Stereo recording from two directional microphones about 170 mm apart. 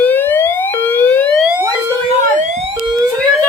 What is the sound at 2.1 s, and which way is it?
Siren, 45° right (ahead or behind).